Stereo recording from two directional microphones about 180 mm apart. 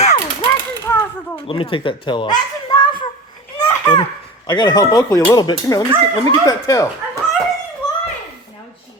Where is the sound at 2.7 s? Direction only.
25° left (ahead or behind).